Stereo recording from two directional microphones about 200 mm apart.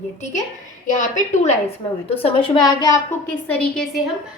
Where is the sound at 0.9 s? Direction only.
35° left (ahead or behind); by 3.0 s 20° left (ahead or behind).